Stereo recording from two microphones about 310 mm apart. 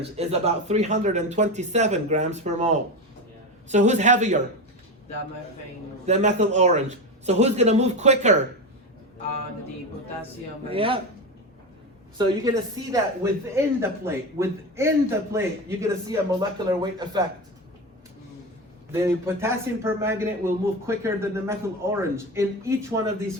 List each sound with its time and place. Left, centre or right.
0.0 s a man's voice: centre
6.1 s a man's voice: right
10.7 s speech: centre
12.1 s speech: centre
18.9 s speech: centre